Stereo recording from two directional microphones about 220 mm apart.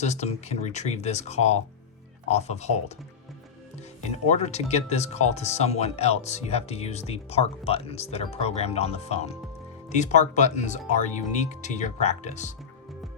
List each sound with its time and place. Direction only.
0.0 s speech: 30° left (ahead or behind)
4.1 s speech: 30° left (ahead or behind)